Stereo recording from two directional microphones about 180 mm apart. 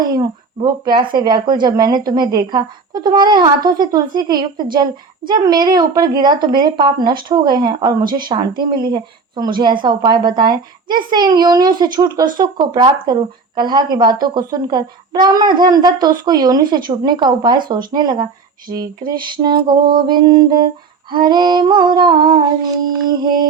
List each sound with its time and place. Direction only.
0.1 s speech: 25° right (ahead or behind)